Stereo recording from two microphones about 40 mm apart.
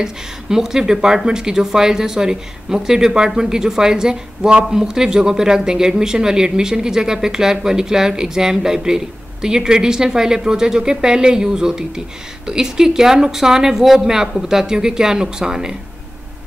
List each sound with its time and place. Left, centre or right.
0.0 s speech: centre